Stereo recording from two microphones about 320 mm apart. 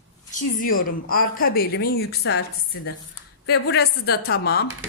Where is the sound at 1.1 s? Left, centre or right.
Left.